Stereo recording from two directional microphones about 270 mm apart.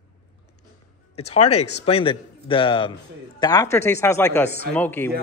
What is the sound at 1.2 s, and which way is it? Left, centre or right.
A man's voice, left.